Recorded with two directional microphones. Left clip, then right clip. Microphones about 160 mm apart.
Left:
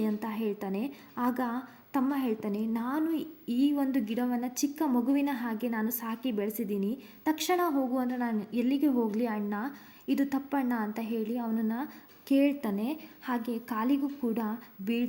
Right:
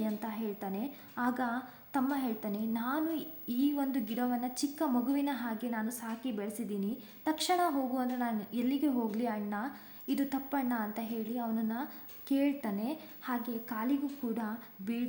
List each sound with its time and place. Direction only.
0.0 s a woman's voice: 20° left (ahead or behind)